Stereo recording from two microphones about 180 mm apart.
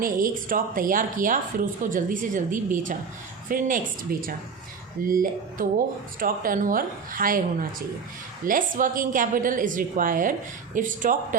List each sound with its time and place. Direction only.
0.0 s a woman's voice: 50° right (ahead or behind)